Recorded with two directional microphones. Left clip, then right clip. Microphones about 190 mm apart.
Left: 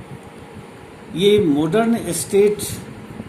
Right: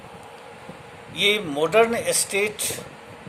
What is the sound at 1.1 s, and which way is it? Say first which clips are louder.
Speech: left 6 dB; 45° right (ahead or behind).